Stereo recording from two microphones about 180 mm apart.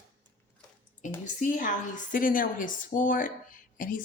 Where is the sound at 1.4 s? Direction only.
45° left (ahead or behind).